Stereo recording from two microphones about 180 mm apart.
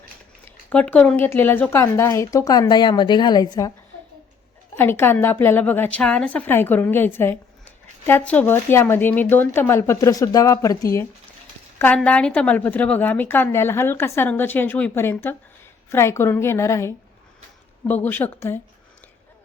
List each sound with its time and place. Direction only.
0.4 s a woman's voice: 10° left (ahead or behind)
4.8 s a woman's voice: 10° left (ahead or behind)
11.9 s a woman's voice: 5° left (ahead or behind)